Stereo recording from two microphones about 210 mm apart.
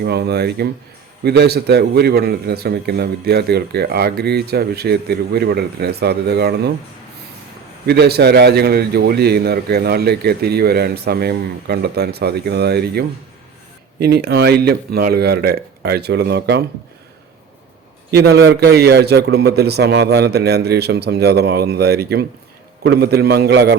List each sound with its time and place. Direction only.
0.0 s a man's voice: 50° right (ahead or behind)
7.9 s a man's voice: 50° right (ahead or behind)
18.1 s a man's voice: 50° right (ahead or behind)